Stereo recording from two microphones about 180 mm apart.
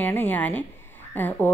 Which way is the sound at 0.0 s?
10° left (ahead or behind).